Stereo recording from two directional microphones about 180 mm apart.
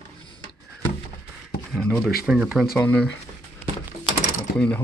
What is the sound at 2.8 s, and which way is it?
Speech, 10° left (ahead or behind).